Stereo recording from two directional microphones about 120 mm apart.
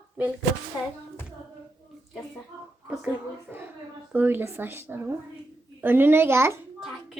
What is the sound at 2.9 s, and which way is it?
A child's voice, 15° right (ahead or behind).